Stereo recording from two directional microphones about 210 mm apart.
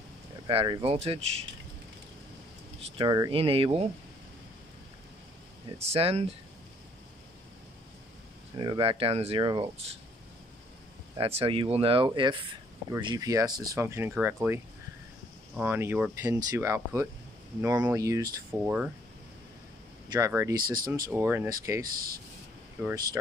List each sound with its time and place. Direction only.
0.5 s speech: 25° right (ahead or behind)
2.8 s speech: 20° right (ahead or behind)
5.8 s speech: 30° right (ahead or behind)
8.5 s speech: 25° right (ahead or behind)
11.1 s speech: 25° right (ahead or behind); by 18.9 s 10° right (ahead or behind)
20.1 s speech: 15° right (ahead or behind)
20.5 s speech: 45° right (ahead or behind)
21.1 s speech: 10° right (ahead or behind)
21.9 s speech: 45° right (ahead or behind)